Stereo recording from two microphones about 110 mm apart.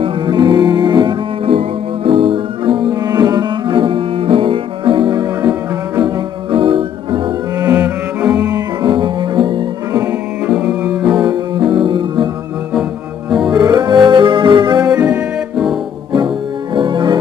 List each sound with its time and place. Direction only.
0.0 s music: 45° right (ahead or behind)
2.9 s music: 35° right (ahead or behind)
7.7 s cello: 15° right (ahead or behind)
8.5 s music: 40° right (ahead or behind)
10.4 s music: 10° right (ahead or behind)
11.1 s music: 40° right (ahead or behind)
13.5 s music: 40° right (ahead or behind)
14.9 s music: 10° right (ahead or behind)
16.7 s music: 45° right (ahead or behind)